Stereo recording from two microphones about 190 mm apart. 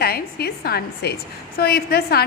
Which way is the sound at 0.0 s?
55° left (ahead or behind).